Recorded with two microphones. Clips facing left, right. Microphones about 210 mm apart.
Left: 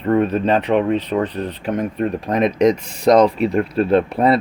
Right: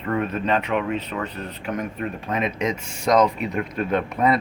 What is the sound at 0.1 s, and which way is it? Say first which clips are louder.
Speech: left 7 dB; 35° left (ahead or behind).